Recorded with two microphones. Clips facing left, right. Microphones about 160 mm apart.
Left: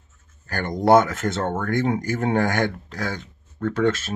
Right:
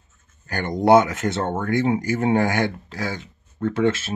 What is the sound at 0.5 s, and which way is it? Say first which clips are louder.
Speech: right 1 dB; 10° right (ahead or behind).